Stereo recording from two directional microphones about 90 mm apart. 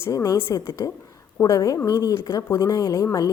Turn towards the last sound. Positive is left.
turn(degrees=40)  # may be behind; listen again after turning